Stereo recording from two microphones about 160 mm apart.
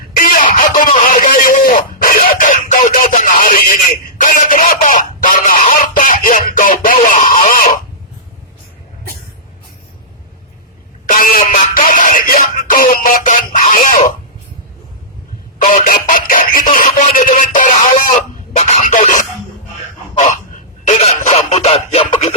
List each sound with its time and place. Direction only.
0.2 s speech: 55° left (ahead or behind)
11.0 s music: 60° left (ahead or behind)
15.6 s speech: 55° left (ahead or behind)
20.8 s a sound: 45° left (ahead or behind)